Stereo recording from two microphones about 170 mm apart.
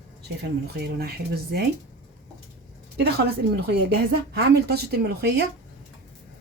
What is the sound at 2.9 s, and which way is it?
A woman's voice, 70° right (ahead or behind).